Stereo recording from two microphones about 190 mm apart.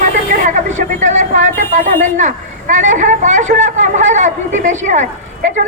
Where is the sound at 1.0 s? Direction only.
40° right (ahead or behind).